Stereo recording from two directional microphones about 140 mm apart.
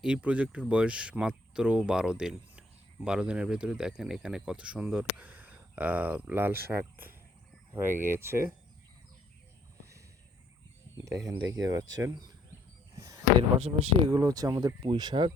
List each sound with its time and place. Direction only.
0.0 s speech: 10° right (ahead or behind)
11.0 s speech: 25° right (ahead or behind)
13.6 s speech: 50° right (ahead or behind)
14.1 s speech: 25° right (ahead or behind)